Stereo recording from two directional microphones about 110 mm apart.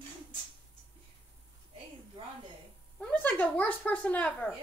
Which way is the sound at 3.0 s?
15° left (ahead or behind).